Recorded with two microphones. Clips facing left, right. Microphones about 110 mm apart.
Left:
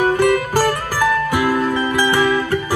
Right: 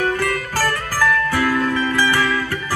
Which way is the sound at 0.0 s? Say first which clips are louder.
Left 6 dB; 20° left (ahead or behind).